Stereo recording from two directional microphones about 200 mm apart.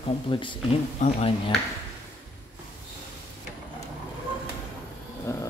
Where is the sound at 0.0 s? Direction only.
25° left (ahead or behind).